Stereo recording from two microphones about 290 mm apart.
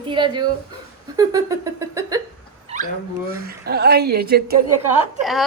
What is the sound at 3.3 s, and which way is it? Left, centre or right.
Speech, right.